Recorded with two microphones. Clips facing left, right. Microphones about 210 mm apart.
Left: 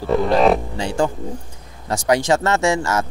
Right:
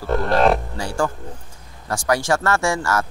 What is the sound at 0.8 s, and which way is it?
Speech, 20° left (ahead or behind).